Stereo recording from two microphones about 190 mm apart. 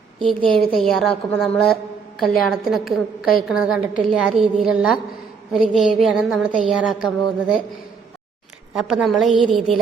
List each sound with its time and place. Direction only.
0.2 s a woman's voice: 25° right (ahead or behind)
0.7 s a woman's voice: centre (ahead or behind)
8.7 s a woman's voice: 5° right (ahead or behind)